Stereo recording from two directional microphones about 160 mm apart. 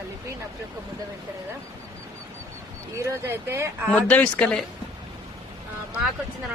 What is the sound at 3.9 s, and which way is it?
Speech, 10° left (ahead or behind).